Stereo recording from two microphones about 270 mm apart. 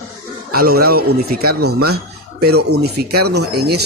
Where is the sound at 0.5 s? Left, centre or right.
Right.